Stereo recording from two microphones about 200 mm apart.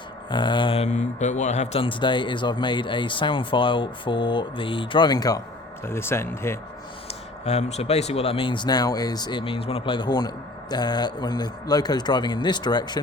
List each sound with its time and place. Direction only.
0.3 s speech: 25° left (ahead or behind)
7.1 s speech: 30° left (ahead or behind)